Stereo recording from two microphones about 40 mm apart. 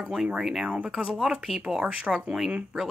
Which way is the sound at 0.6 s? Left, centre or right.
Right.